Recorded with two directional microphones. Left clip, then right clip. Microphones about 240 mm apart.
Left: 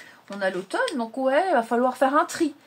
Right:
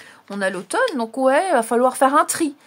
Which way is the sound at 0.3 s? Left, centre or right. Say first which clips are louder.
Right 4 dB; right.